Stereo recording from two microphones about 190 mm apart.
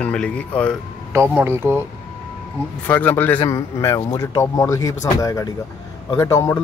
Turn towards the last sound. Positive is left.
turn(degrees=15)  # may be behind; listen again after turning